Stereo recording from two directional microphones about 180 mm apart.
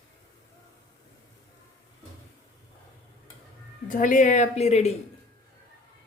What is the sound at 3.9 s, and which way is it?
A woman's voice, 45° left (ahead or behind).